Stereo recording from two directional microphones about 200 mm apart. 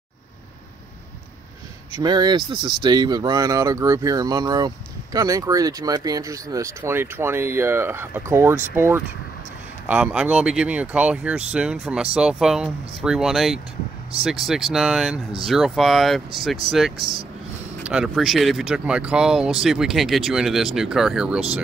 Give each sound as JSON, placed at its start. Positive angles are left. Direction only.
{"t": 1.9, "sound": "speech", "side_deg": -20}
{"t": 16.9, "sound": "speech", "side_deg": -25}
{"t": 17.8, "sound": "speech", "side_deg": 0}